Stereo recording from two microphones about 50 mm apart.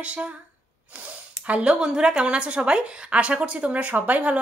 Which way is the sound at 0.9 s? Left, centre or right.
Right.